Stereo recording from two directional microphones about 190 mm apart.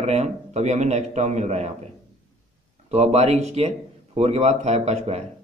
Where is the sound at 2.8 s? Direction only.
35° right (ahead or behind).